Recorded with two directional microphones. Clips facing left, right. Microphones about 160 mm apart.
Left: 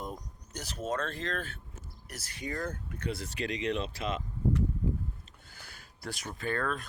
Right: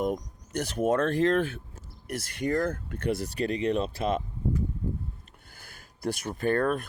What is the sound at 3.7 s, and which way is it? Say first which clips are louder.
Speech: right 5 dB; 45° right (ahead or behind).